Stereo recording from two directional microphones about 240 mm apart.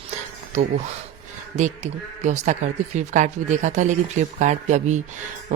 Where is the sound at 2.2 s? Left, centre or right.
Right.